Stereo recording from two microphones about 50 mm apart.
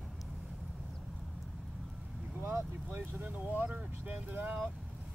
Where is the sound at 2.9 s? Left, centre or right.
Right.